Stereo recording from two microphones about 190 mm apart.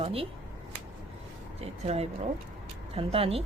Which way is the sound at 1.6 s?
35° right (ahead or behind).